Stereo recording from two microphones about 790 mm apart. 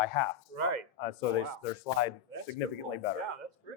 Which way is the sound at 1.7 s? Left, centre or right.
Left.